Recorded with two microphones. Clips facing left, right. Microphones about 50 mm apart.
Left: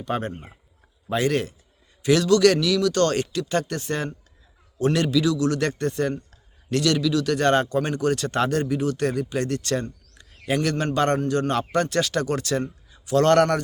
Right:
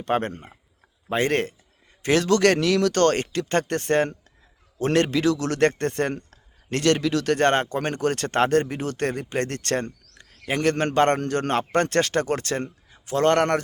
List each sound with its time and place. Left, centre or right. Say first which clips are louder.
0.0 s speech: right 3 dB; right
6.7 s speech: even; right
10.4 s speech: right 1 dB; right